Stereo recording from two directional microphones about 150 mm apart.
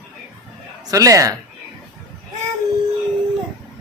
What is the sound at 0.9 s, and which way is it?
Speech, 20° right (ahead or behind).